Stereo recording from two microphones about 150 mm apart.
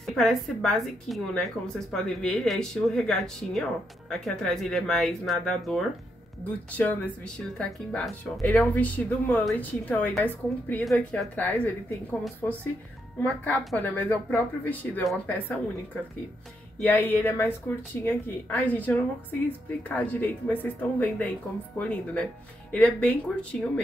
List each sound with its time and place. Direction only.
0.0 s speech: centre (ahead or behind)